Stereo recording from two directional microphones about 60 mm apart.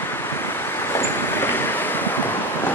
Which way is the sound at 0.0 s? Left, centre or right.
Left.